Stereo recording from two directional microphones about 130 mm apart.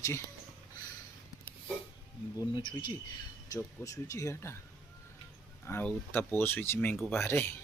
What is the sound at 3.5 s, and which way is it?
Speech, 25° left (ahead or behind).